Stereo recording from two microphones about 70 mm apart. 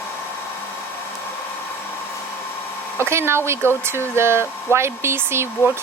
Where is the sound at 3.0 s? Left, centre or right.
Right.